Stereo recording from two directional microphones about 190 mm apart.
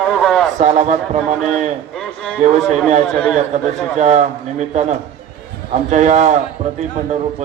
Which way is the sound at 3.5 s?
35° right (ahead or behind).